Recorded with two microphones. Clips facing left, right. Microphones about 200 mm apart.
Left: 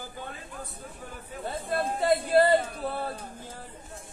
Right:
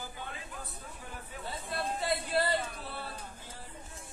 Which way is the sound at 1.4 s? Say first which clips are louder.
Left 7 dB; 55° left (ahead or behind).